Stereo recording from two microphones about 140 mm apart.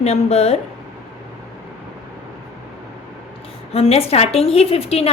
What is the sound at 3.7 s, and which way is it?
A woman's voice, 45° left (ahead or behind).